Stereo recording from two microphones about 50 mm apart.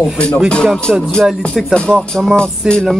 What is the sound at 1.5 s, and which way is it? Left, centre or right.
Music, centre.